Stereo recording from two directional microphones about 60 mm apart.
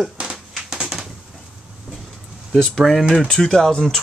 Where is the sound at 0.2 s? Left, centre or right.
Centre.